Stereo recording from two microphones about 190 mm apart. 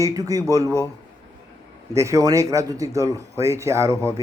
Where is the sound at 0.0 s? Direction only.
15° right (ahead or behind).